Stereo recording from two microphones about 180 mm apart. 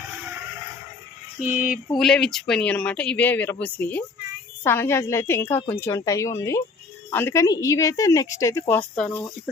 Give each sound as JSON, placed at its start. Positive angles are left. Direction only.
{"t": 2.0, "sound": "a woman's voice", "side_deg": 5}